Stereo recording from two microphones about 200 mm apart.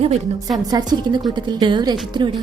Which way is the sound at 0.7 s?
20° right (ahead or behind).